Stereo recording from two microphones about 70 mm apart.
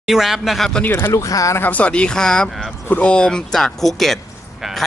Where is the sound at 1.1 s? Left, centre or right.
Left.